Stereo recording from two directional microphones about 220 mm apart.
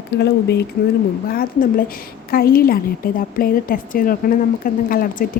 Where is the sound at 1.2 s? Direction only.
40° left (ahead or behind).